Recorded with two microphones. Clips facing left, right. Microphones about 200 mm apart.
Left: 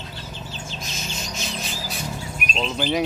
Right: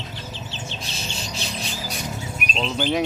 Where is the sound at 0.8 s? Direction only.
30° right (ahead or behind).